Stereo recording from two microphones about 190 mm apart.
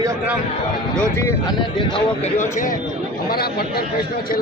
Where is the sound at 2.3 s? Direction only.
40° left (ahead or behind).